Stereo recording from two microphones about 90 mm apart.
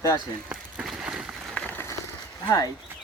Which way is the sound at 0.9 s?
5° right (ahead or behind).